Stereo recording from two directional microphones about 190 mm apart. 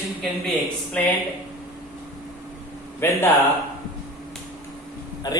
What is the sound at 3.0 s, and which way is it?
Speech, 15° left (ahead or behind).